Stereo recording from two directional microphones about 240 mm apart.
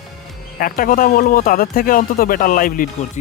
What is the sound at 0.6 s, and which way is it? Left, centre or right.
Speech, left.